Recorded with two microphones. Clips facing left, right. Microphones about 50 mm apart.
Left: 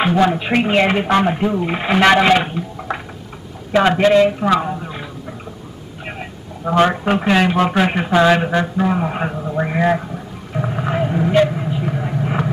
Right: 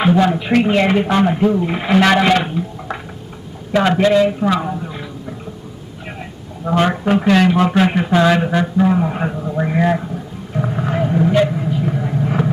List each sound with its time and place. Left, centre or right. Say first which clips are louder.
0.0 s a woman's voice: right 1 dB; centre
6.6 s a man's voice: left 1 dB; centre
10.5 s a sound: right 1 dB; centre